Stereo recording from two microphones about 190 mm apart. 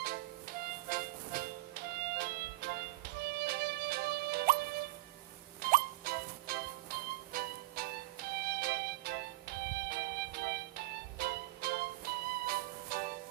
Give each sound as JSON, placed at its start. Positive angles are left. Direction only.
{"t": 0.0, "sound": "music", "side_deg": -50}